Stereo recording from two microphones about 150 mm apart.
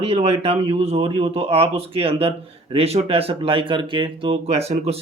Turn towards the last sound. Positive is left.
turn(degrees=-45)  # may be behind; listen again after turning